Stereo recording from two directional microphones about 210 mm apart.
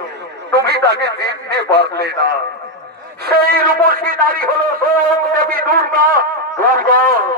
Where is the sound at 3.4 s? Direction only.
45° right (ahead or behind).